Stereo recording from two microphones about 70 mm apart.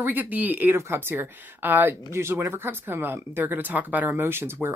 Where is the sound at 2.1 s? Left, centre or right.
Right.